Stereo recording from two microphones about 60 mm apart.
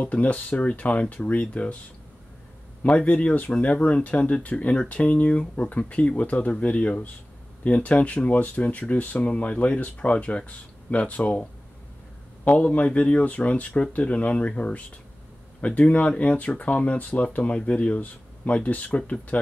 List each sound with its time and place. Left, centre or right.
0.0 s speech: left
2.8 s speech: left
12.5 s speech: left